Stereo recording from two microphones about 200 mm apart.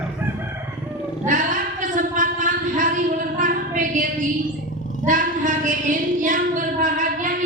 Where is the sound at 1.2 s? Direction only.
40° right (ahead or behind).